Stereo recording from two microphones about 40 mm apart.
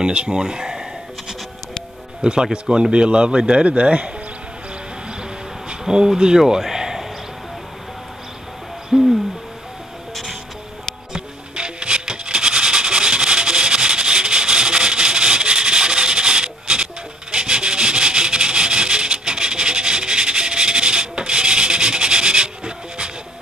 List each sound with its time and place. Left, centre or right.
0.0 s speech: right
2.5 s speech: right
5.7 s speech: centre
8.9 s hoot: centre
11.1 s music: right